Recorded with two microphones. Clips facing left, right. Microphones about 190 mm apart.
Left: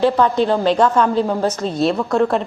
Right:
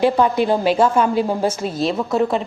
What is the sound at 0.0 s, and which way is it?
A woman's voice, 10° right (ahead or behind).